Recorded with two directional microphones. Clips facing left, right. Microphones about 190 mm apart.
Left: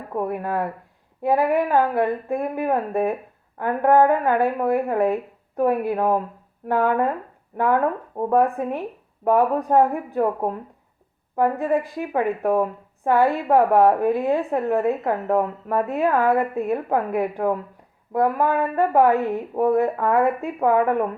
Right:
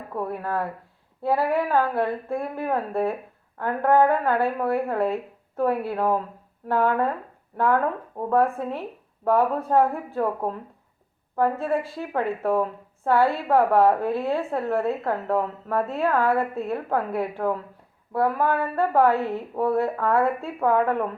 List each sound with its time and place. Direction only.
0.1 s a woman's voice: 20° left (ahead or behind)